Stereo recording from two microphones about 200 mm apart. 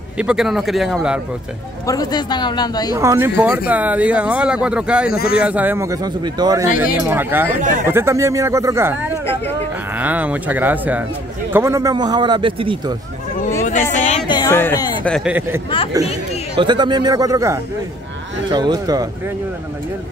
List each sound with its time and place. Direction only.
0.2 s a man's voice: 5° right (ahead or behind)
1.9 s speech: 20° left (ahead or behind)
2.9 s speech: 15° right (ahead or behind)
6.7 s speech: 45° left (ahead or behind)
7.1 s a man's voice: 10° right (ahead or behind); by 12.9 s 25° right (ahead or behind)
13.7 s speech: 35° left (ahead or behind); by 15.1 s 10° left (ahead or behind)
15.1 s speech: 5° right (ahead or behind)
16.5 s a man's voice: 20° right (ahead or behind)